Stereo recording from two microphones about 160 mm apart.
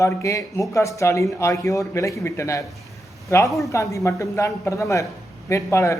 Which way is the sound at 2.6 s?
Centre (ahead or behind).